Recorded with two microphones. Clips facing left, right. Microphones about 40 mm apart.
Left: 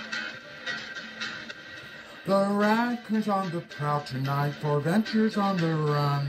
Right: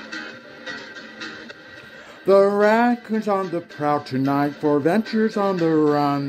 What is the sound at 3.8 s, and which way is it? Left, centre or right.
Speech, right.